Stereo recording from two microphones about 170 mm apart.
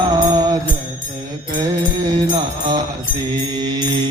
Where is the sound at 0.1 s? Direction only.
20° right (ahead or behind).